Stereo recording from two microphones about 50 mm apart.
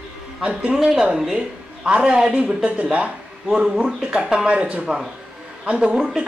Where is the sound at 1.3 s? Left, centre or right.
Right.